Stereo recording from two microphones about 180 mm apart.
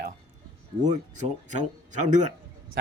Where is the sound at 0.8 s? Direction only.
40° right (ahead or behind).